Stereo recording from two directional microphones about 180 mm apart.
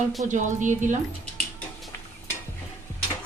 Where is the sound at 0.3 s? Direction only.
45° right (ahead or behind).